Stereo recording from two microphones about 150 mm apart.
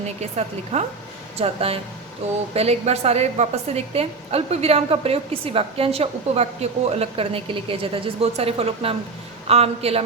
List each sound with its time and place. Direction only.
0.2 s a woman's voice: 45° right (ahead or behind)